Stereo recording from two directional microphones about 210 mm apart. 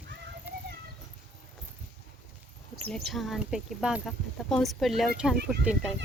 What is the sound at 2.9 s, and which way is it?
Speech, centre (ahead or behind).